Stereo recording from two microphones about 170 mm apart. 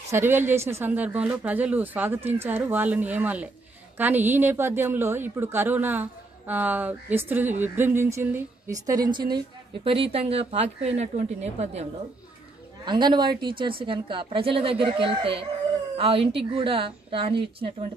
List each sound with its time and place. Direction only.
0.1 s a woman's voice: 15° right (ahead or behind)
10.1 s a woman's voice: 40° right (ahead or behind)
12.8 s a woman's voice: 25° right (ahead or behind)